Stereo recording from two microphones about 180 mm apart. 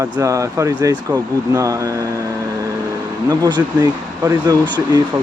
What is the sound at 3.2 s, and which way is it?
Speech, 20° right (ahead or behind).